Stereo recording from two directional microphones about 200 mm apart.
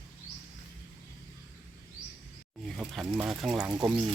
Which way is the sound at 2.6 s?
Centre (ahead or behind).